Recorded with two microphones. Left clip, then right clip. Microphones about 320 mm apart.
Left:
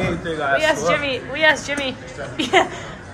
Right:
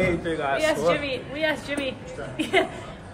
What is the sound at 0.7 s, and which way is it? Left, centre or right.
Speech, centre.